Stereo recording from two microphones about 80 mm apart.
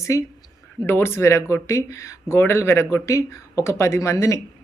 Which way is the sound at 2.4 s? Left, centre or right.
Left.